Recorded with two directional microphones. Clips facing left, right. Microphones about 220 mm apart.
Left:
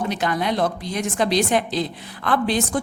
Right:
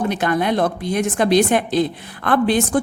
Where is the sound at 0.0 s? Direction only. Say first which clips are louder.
Right 4 dB; 55° right (ahead or behind).